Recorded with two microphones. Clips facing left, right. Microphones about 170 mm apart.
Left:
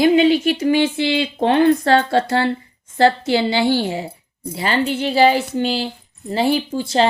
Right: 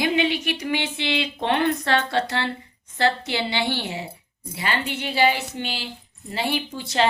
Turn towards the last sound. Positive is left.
turn(degrees=30)  # may be behind; listen again after turning